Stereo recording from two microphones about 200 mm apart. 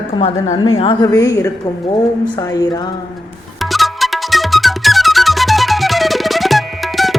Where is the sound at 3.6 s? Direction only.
Centre (ahead or behind).